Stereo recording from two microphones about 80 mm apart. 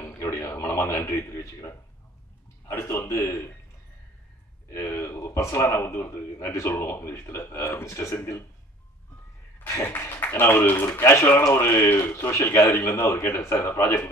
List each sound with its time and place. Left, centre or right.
0.2 s a sound: left
0.7 s a man's voice: left
4.6 s a man's voice: left
9.6 s a man's voice: left